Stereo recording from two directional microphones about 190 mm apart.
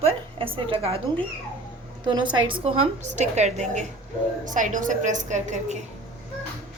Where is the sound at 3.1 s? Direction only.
35° right (ahead or behind).